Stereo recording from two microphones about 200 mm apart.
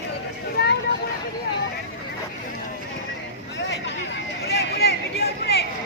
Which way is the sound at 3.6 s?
60° left (ahead or behind).